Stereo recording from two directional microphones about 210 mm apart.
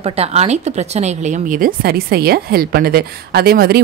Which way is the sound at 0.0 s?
30° right (ahead or behind).